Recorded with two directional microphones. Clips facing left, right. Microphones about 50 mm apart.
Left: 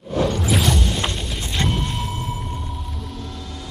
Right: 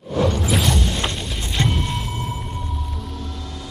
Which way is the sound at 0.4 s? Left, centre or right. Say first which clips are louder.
Even; centre.